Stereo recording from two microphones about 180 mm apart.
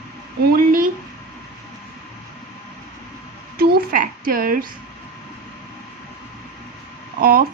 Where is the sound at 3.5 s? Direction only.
55° right (ahead or behind).